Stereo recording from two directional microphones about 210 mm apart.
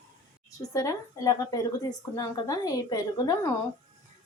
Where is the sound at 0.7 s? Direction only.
15° left (ahead or behind).